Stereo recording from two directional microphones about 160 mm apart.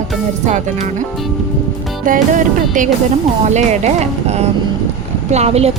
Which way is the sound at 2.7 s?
55° right (ahead or behind).